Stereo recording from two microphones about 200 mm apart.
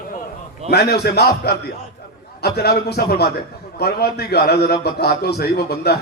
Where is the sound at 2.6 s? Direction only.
55° left (ahead or behind).